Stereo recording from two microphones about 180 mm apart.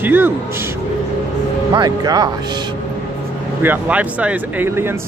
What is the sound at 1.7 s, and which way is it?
Speech, 20° right (ahead or behind).